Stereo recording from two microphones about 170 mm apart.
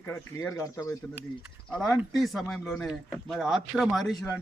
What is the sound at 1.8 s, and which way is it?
Speech, centre (ahead or behind).